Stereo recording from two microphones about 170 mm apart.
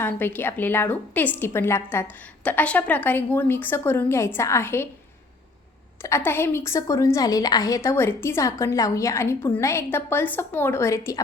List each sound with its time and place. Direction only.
0.0 s a woman's voice: 10° left (ahead or behind)
6.0 s a woman's voice: 15° left (ahead or behind)